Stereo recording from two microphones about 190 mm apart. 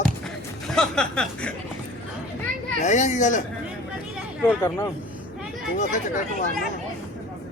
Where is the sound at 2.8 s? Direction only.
40° left (ahead or behind).